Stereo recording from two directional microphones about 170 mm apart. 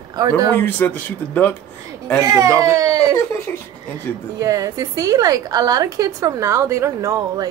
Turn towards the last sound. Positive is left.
turn(degrees=-15)  # may be behind; listen again after turning